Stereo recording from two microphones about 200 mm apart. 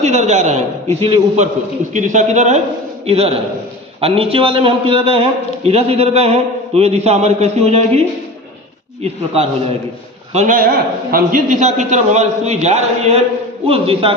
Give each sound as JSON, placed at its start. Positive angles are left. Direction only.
{"t": 0.0, "sound": "a man's voice", "side_deg": -35}
{"t": 9.0, "sound": "a man's voice", "side_deg": -30}
{"t": 10.3, "sound": "a man's voice", "side_deg": -40}